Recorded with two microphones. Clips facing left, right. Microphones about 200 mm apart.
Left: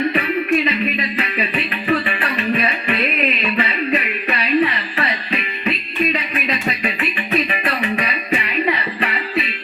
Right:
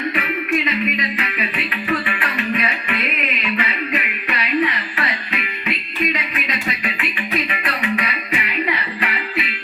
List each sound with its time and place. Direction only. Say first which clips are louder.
0.6 s music: left 2 dB; 30° left (ahead or behind)
3.4 s a sound: left 3 dB; 35° left (ahead or behind)
7.6 s music: left 2 dB; 35° left (ahead or behind)